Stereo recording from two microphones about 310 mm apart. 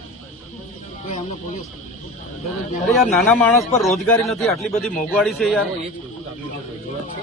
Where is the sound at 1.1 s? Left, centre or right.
Left.